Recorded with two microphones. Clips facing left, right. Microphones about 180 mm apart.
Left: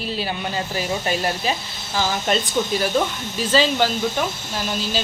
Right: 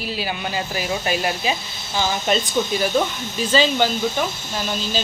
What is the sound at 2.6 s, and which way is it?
Speech, centre (ahead or behind).